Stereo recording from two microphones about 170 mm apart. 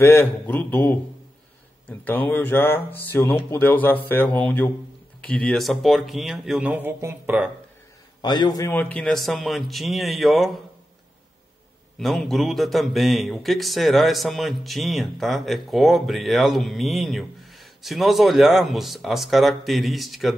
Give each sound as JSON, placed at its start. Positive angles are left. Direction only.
{"t": 0.0, "sound": "speech", "side_deg": 15}
{"t": 8.2, "sound": "speech", "side_deg": 25}
{"t": 12.0, "sound": "speech", "side_deg": 0}